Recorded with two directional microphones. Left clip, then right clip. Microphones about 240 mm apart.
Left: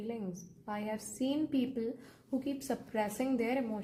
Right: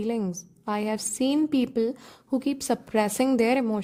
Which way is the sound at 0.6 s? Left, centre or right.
Right.